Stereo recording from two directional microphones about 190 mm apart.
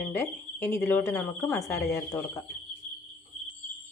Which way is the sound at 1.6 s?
Centre (ahead or behind).